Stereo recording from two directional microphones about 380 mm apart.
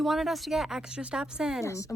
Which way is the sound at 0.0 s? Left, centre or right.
Centre.